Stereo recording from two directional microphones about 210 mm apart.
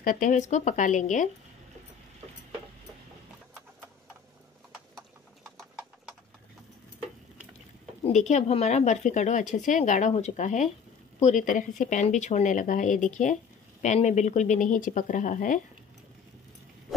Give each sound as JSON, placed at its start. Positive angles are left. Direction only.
{"t": 0.0, "sound": "speech", "side_deg": 40}
{"t": 8.0, "sound": "speech", "side_deg": 35}